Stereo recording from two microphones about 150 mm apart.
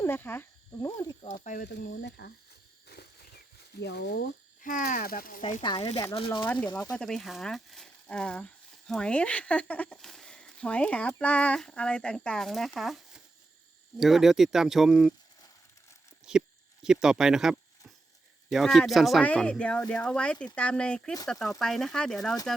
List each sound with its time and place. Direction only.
0.0 s speech: 15° left (ahead or behind)
1.5 s speech: 65° left (ahead or behind)
2.8 s a sound: 90° left; by 5.4 s 70° left (ahead or behind)
5.4 s speech: 55° left (ahead or behind)
5.6 s speech: 40° left (ahead or behind)
6.9 s speech: 5° left (ahead or behind)
16.3 s speech: 5° right (ahead or behind)